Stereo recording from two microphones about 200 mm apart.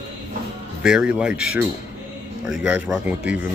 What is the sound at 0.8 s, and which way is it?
A man's voice, 5° right (ahead or behind).